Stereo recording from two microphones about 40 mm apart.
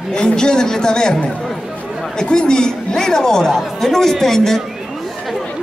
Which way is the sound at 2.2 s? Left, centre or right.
Left.